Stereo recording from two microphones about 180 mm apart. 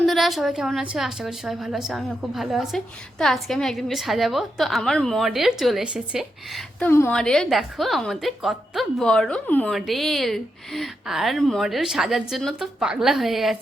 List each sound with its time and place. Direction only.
0.0 s a woman's voice: centre (ahead or behind)
6.7 s a woman's voice: 10° left (ahead or behind)